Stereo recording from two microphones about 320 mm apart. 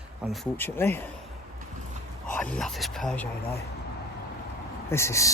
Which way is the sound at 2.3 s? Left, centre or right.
Centre.